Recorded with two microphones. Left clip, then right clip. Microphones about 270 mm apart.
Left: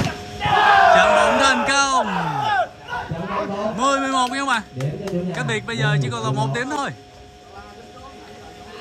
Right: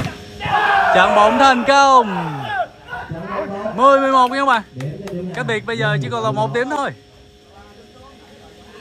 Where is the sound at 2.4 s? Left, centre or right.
Centre.